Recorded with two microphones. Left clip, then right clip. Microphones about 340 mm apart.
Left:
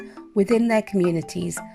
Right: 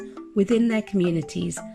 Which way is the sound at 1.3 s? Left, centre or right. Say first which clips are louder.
Left 1 dB; left.